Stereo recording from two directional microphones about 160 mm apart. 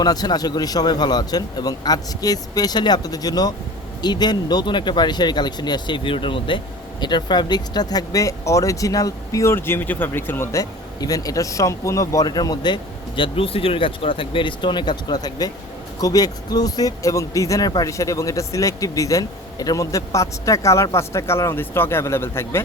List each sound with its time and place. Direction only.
0.0 s speech: 25° left (ahead or behind)